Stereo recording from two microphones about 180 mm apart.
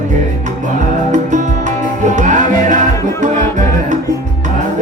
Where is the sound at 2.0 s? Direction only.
45° right (ahead or behind).